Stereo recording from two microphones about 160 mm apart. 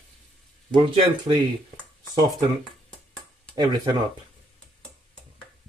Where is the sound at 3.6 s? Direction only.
25° right (ahead or behind).